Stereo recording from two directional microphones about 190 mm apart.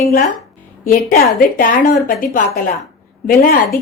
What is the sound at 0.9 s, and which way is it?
A woman's voice, 50° left (ahead or behind).